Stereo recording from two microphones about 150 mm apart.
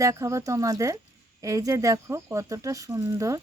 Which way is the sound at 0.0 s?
20° right (ahead or behind).